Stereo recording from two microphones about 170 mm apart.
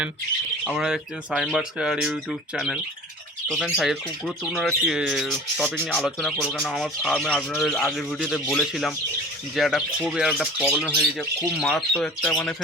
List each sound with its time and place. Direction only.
0.6 s speech: 5° right (ahead or behind)
3.5 s speech: centre (ahead or behind)